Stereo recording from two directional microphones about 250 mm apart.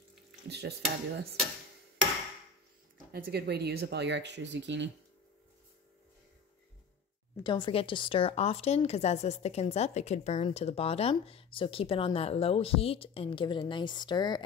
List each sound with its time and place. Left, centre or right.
0.5 s stir: right
3.1 s speech: right
7.4 s a woman's voice: centre